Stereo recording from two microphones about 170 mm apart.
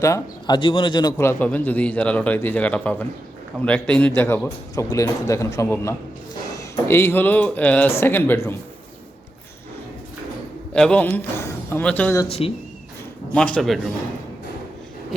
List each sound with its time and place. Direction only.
0.0 s a man's voice: 20° left (ahead or behind)
10.8 s a man's voice: 5° left (ahead or behind)
12.4 s speech: 35° left (ahead or behind)
13.3 s speech: 5° left (ahead or behind)